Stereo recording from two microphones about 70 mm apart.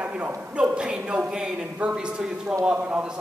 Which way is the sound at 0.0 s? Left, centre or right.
Centre.